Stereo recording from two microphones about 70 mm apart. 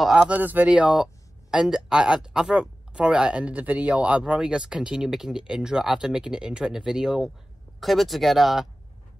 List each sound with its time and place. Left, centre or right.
0.1 s speech: centre
0.4 s speech: right
0.7 s speech: centre